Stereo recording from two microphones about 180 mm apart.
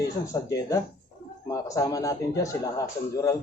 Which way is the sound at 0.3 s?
20° left (ahead or behind).